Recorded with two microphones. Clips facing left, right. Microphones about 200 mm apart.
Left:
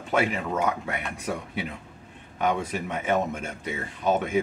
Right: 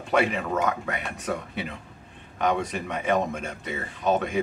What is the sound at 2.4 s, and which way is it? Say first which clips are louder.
Speech: right 1 dB; 10° left (ahead or behind).